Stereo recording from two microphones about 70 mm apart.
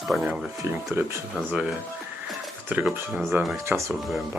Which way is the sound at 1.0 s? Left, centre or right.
Right.